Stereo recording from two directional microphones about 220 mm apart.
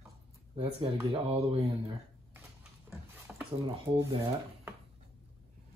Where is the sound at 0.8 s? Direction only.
25° right (ahead or behind).